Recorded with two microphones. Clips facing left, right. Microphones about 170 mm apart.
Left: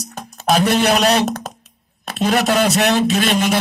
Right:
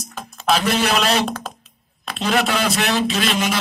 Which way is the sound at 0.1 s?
40° left (ahead or behind).